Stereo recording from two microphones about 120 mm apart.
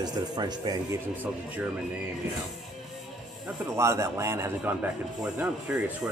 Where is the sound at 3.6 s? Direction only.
25° right (ahead or behind).